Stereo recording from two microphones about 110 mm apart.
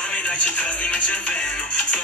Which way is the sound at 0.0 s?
10° left (ahead or behind).